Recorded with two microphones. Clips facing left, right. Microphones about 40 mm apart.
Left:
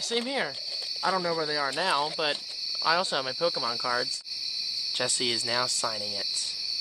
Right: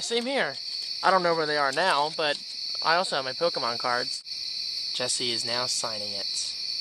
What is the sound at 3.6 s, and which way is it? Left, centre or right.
Cricket, centre.